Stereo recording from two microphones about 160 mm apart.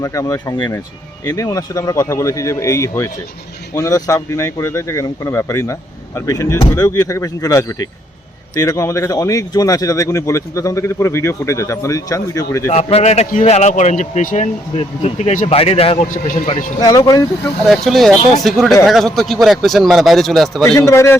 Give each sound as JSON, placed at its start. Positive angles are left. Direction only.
{"t": 0.0, "sound": "speech", "side_deg": 20}
{"t": 12.7, "sound": "speech", "side_deg": 40}
{"t": 16.0, "sound": "a man's voice", "side_deg": 60}
{"t": 16.8, "sound": "speech", "side_deg": 25}
{"t": 17.7, "sound": "a man's voice", "side_deg": 0}
{"t": 20.7, "sound": "speech", "side_deg": 15}